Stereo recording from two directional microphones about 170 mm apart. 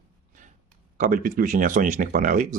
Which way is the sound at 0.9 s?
55° right (ahead or behind).